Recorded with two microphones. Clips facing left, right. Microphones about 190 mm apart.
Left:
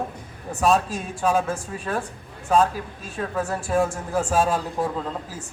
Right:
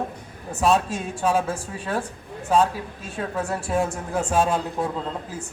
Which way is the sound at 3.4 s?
Centre (ahead or behind).